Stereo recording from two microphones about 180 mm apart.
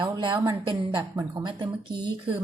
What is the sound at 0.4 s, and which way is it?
Speech, 25° right (ahead or behind).